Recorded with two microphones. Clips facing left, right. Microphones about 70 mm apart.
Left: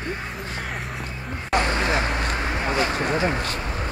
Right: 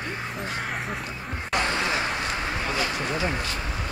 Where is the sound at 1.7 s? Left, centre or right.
Left.